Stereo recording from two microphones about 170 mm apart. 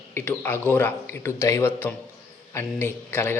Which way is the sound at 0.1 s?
10° left (ahead or behind).